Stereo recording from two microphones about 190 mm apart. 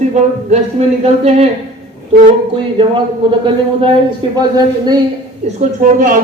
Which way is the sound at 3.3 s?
25° right (ahead or behind).